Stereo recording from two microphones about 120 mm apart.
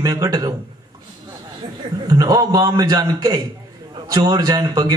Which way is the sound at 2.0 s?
30° right (ahead or behind).